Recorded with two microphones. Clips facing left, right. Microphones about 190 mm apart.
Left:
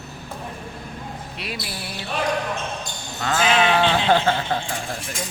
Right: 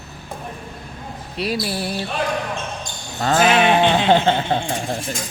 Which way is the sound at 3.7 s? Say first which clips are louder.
Right 3 dB; 20° right (ahead or behind).